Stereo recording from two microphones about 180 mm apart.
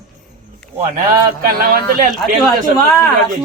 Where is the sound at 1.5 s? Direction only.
55° right (ahead or behind).